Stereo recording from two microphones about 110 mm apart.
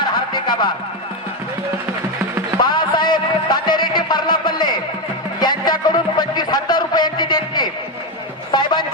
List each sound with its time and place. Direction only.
0.3 s speech: 45° left (ahead or behind)
2.6 s a sound: 45° left (ahead or behind)
5.4 s a man's voice: 40° left (ahead or behind)